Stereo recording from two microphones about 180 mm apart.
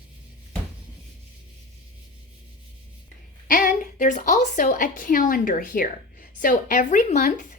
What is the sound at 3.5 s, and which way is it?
A woman's voice, 50° left (ahead or behind).